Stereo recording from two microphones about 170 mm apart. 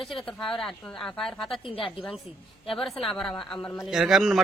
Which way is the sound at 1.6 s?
30° left (ahead or behind).